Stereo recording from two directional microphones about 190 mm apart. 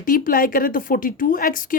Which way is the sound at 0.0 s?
45° left (ahead or behind).